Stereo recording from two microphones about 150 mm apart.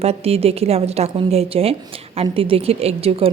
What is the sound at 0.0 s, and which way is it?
A woman's voice, 45° right (ahead or behind).